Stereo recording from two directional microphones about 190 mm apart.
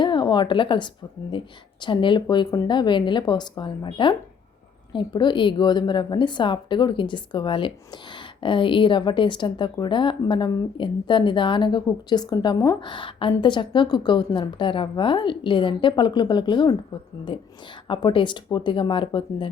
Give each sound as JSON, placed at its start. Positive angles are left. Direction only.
{"t": 0.0, "sound": "speech", "side_deg": 25}